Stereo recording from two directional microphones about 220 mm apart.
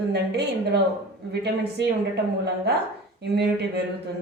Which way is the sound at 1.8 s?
50° right (ahead or behind).